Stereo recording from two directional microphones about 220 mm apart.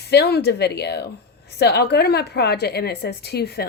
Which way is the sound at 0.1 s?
45° left (ahead or behind).